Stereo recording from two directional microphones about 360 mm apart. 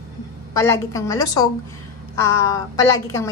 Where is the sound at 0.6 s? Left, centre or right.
Centre.